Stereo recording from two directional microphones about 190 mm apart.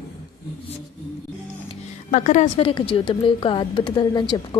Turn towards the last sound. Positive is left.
turn(degrees=20)  # may be behind; listen again after turning